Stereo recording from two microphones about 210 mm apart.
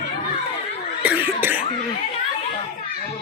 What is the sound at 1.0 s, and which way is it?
Cough, 10° right (ahead or behind).